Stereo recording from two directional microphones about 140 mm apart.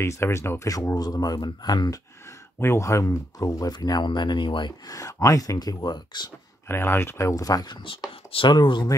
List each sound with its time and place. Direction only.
0.0 s speech: 20° left (ahead or behind)
6.7 s speech: 15° left (ahead or behind); by 8.9 s 30° left (ahead or behind)